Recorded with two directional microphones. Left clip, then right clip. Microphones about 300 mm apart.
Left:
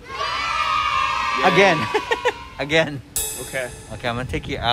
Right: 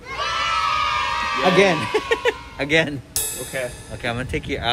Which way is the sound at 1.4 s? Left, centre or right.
Left.